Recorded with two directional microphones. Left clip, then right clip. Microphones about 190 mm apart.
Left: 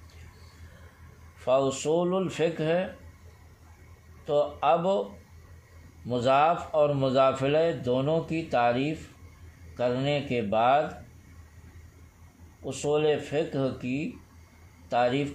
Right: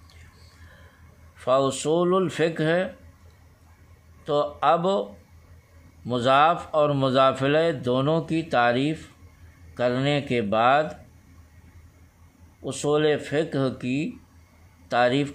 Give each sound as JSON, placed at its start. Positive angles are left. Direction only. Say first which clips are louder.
{"t": 1.4, "sound": "speech", "louder": "right 3 dB", "side_deg": -35}
{"t": 4.2, "sound": "speech", "louder": "right 2 dB", "side_deg": -35}
{"t": 6.0, "sound": "speech", "louder": "right 4 dB", "side_deg": -30}
{"t": 12.6, "sound": "speech", "louder": "right 3 dB", "side_deg": -40}